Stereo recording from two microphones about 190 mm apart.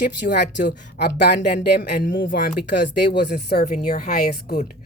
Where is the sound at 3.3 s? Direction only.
40° left (ahead or behind).